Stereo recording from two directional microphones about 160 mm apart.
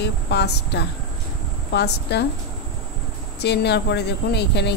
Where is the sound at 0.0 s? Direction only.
90° left.